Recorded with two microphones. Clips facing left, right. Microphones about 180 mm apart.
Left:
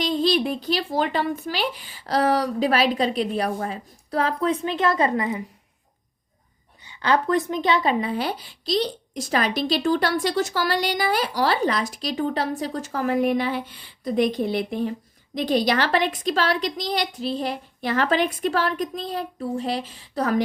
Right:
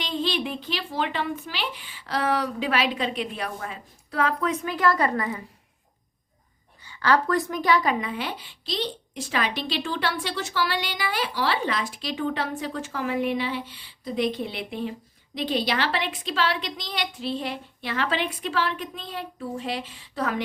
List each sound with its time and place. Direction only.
0.0 s speech: 40° left (ahead or behind); by 5.4 s 20° left (ahead or behind)
6.8 s speech: 20° left (ahead or behind); by 20.4 s 40° left (ahead or behind)